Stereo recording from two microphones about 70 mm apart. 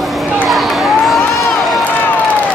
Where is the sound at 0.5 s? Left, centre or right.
Centre.